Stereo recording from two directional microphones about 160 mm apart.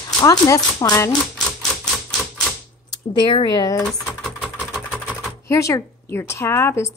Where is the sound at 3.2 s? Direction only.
30° left (ahead or behind).